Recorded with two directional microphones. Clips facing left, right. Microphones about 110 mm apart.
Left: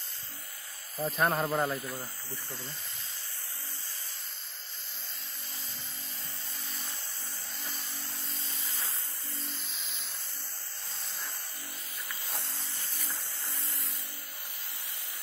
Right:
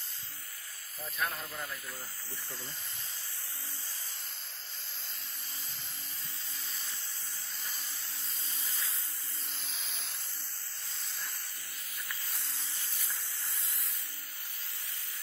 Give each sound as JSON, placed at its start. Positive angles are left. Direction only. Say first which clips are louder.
{"t": 0.9, "sound": "speech", "louder": "left 9 dB", "side_deg": 45}
{"t": 1.4, "sound": "speech", "louder": "left 12 dB", "side_deg": 65}
{"t": 8.6, "sound": "a sound", "louder": "left 1 dB", "side_deg": 25}